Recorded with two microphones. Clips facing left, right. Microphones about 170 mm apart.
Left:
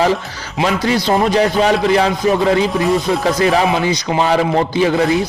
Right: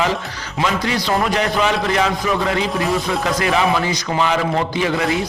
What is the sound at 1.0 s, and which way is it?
A man's voice, 30° left (ahead or behind).